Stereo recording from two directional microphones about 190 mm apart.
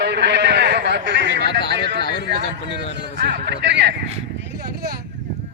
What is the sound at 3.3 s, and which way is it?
Speech, 65° right (ahead or behind).